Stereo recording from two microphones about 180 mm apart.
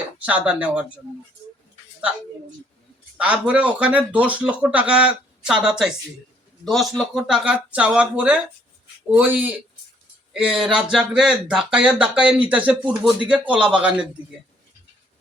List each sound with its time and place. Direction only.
0.3 s speech: 10° right (ahead or behind)
3.2 s speech: 5° right (ahead or behind)